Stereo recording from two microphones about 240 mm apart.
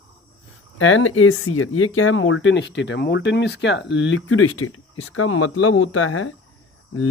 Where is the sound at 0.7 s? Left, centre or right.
Left.